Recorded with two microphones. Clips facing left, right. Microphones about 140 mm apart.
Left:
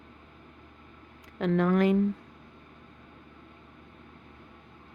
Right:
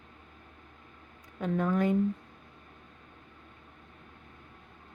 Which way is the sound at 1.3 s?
90° left.